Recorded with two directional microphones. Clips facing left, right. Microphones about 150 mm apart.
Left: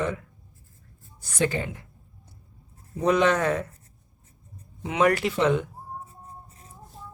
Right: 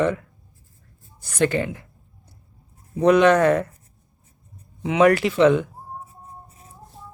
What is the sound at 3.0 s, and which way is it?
Speech, 70° right (ahead or behind).